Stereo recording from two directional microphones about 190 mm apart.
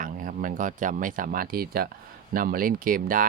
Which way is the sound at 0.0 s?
45° right (ahead or behind).